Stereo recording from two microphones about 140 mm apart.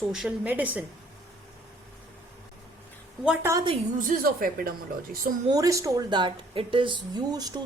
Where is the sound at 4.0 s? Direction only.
80° right.